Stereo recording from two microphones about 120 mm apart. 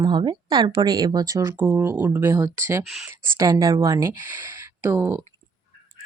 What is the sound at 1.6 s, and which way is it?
Speech, 15° right (ahead or behind).